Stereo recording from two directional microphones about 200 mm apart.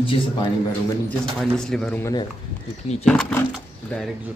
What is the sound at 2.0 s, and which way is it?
Speech, 20° left (ahead or behind).